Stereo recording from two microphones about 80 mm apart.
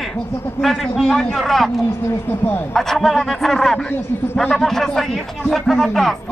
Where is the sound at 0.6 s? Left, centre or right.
Centre.